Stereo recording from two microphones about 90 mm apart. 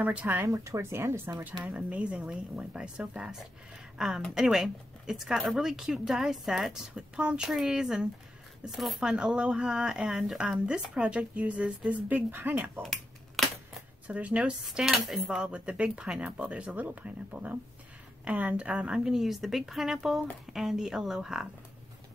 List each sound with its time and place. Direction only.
0.0 s speech: 20° right (ahead or behind)
0.5 s speech: 35° right (ahead or behind)
1.6 s a woman's voice: 15° right (ahead or behind)
13.4 s a sound: centre (ahead or behind)
14.0 s a woman's voice: 15° right (ahead or behind)